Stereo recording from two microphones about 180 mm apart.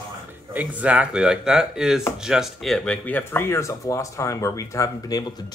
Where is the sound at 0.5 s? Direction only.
10° right (ahead or behind).